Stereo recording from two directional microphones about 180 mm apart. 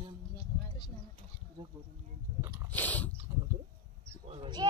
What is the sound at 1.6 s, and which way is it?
Speech, 25° right (ahead or behind).